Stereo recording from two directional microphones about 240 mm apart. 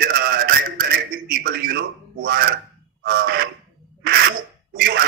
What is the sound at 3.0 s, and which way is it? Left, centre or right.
Crow, right.